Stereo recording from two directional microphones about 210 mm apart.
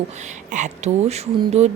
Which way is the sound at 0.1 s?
35° right (ahead or behind).